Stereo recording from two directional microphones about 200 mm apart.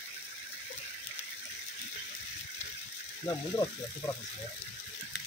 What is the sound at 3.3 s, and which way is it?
Speech, 15° left (ahead or behind).